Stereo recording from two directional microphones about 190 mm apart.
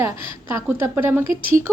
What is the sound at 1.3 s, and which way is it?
Speech, 45° right (ahead or behind).